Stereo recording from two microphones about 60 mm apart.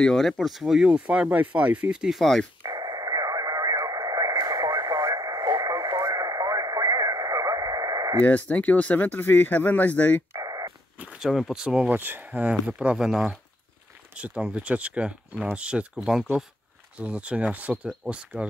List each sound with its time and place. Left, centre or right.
0.0 s speech: centre
2.1 s speech: centre
2.6 s radio: right
8.2 s speech: left
11.1 s speech: centre
11.9 s speech: right
12.3 s speech: centre
14.1 s speech: right
16.9 s speech: centre